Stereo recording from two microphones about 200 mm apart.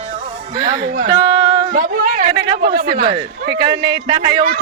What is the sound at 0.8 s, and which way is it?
Speech, 50° right (ahead or behind).